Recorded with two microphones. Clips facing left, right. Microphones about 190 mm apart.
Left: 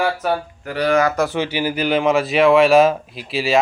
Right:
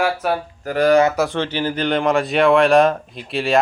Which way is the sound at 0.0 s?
Centre (ahead or behind).